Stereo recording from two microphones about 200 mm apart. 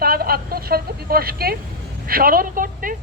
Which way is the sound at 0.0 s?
50° right (ahead or behind).